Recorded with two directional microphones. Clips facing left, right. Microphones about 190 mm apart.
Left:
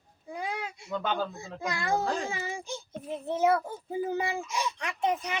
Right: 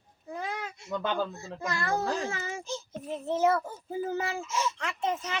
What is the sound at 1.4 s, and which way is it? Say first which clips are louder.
A child's voice: even; 15° left (ahead or behind).